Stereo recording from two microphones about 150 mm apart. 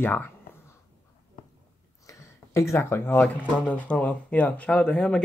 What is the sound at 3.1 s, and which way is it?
Speech, 10° left (ahead or behind).